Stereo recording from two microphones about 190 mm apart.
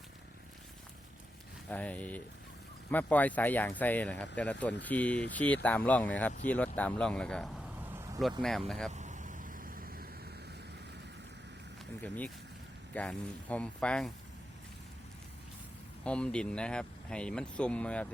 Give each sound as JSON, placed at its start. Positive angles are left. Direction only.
{"t": 1.7, "sound": "speech", "side_deg": 5}
{"t": 7.9, "sound": "vehicle", "side_deg": -15}
{"t": 8.2, "sound": "speech", "side_deg": 0}
{"t": 8.9, "sound": "vehicle", "side_deg": -40}
{"t": 12.0, "sound": "speech", "side_deg": 10}
{"t": 16.0, "sound": "speech", "side_deg": 5}